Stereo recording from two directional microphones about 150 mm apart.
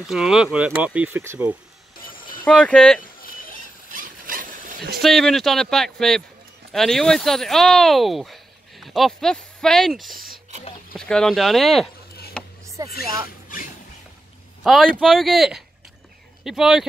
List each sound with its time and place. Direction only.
0.0 s speech: 5° right (ahead or behind)
2.4 s speech: 5° left (ahead or behind)
3.9 s dog: 65° right (ahead or behind)
5.0 s speech: centre (ahead or behind)
12.6 s a sound: 20° right (ahead or behind)
14.6 s speech: centre (ahead or behind)